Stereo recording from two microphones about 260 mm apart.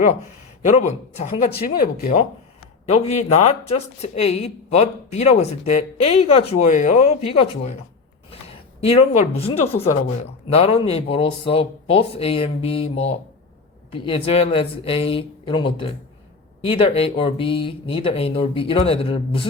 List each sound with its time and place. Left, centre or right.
0.6 s speech: left
8.3 s a sound: left
9.8 s speech: left
14.3 s speech: left